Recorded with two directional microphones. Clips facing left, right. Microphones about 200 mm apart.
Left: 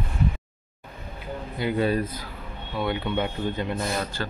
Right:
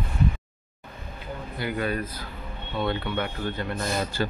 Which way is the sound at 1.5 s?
25° left (ahead or behind).